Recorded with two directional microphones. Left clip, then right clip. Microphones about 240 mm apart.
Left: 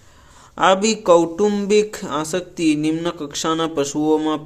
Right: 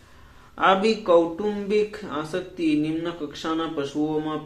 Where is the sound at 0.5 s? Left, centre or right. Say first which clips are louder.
Left 4 dB; left.